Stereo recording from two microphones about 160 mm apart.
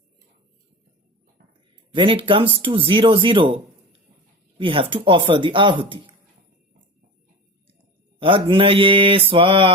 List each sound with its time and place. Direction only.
1.9 s speech: 30° right (ahead or behind)
8.2 s speech: 35° right (ahead or behind)